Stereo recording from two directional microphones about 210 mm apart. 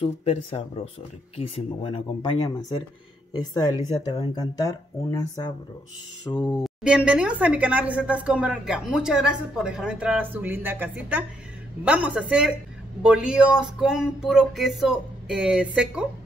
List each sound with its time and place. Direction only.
0.0 s speech: 30° left (ahead or behind)
6.6 s speech: 5° right (ahead or behind)